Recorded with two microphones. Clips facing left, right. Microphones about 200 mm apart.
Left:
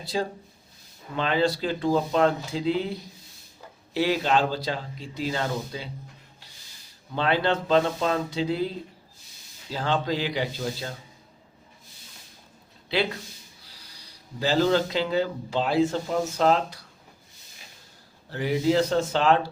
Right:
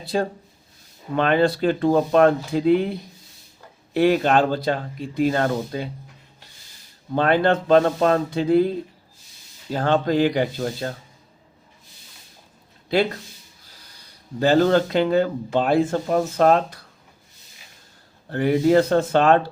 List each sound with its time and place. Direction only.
0.0 s speech: 55° right (ahead or behind)
3.9 s speech: 55° right (ahead or behind)
7.2 s speech: 50° right (ahead or behind)
14.3 s speech: 55° right (ahead or behind)
18.3 s speech: 55° right (ahead or behind)